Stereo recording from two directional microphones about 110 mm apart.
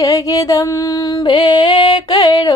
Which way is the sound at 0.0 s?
30° left (ahead or behind).